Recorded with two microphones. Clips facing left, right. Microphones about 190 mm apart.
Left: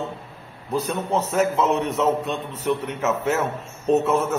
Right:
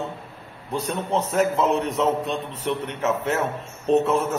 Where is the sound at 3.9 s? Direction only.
5° left (ahead or behind).